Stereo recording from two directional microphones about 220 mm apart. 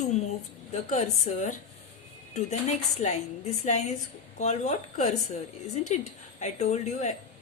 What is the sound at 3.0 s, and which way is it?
A woman's voice, 35° left (ahead or behind).